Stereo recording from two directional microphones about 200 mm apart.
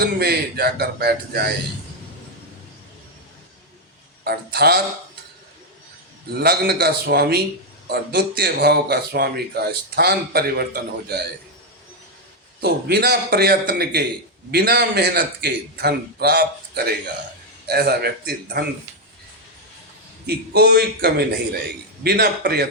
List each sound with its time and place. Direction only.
0.0 s speech: 55° right (ahead or behind)
4.2 s a man's voice: 55° right (ahead or behind)
6.3 s speech: 55° right (ahead or behind)
12.6 s speech: 55° right (ahead or behind)
20.2 s speech: 50° right (ahead or behind)